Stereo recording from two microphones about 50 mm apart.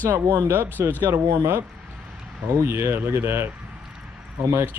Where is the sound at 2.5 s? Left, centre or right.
Right.